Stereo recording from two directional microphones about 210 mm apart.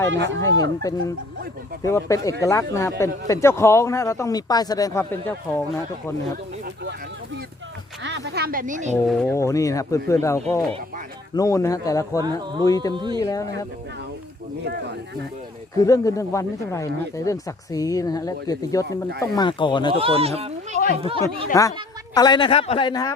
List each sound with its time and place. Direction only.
0.1 s speech: 60° right (ahead or behind)
0.3 s speech: 15° left (ahead or behind)
8.0 s speech: 55° right (ahead or behind); by 9.0 s 35° right (ahead or behind)
9.0 s speech: 5° left (ahead or behind)
9.3 s speech: 15° left (ahead or behind)
12.9 s speech: 20° right (ahead or behind)
13.1 s speech: 15° left (ahead or behind)
14.6 s speech: 55° right (ahead or behind)
15.8 s speech: 15° left (ahead or behind)
19.9 s speech: 25° right (ahead or behind)
22.1 s speech: 20° left (ahead or behind)